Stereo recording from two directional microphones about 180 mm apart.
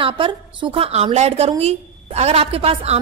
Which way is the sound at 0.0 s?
30° right (ahead or behind).